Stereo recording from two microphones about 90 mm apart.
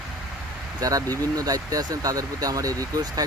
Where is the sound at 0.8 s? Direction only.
40° right (ahead or behind).